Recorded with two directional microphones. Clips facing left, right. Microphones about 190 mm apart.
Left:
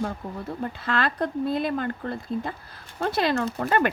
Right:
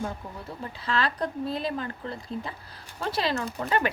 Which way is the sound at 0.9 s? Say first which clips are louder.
Left 1 dB; 50° left (ahead or behind).